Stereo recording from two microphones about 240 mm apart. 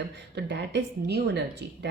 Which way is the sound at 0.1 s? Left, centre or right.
Right.